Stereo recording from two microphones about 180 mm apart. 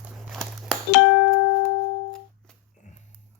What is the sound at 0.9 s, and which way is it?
Music, 55° left (ahead or behind).